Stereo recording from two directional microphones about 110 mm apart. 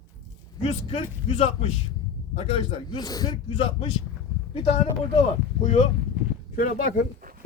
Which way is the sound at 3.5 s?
60° left (ahead or behind).